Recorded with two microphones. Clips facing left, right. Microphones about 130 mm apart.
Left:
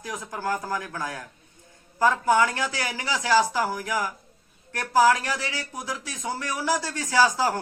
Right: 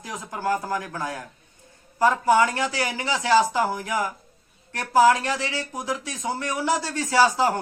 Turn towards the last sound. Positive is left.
turn(degrees=-20)  # may be behind; listen again after turning